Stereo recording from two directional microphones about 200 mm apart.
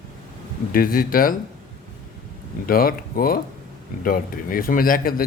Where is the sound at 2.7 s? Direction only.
45° left (ahead or behind).